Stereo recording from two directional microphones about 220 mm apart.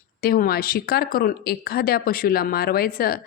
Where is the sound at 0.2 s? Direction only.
45° left (ahead or behind).